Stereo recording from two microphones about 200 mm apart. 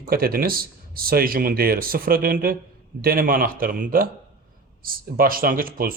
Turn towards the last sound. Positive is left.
turn(degrees=-45)  # may be behind; listen again after turning